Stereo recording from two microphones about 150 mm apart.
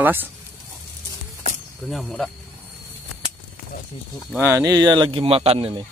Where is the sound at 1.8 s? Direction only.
Centre (ahead or behind).